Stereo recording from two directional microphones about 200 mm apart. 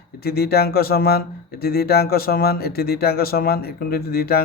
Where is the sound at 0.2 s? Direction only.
50° left (ahead or behind).